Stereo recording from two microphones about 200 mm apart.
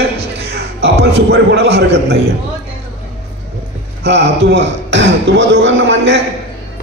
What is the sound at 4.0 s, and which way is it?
Speech, 60° right (ahead or behind).